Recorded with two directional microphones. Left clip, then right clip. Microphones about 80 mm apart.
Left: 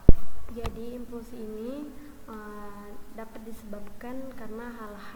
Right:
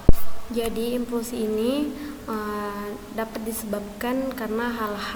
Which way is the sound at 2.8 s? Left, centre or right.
Centre.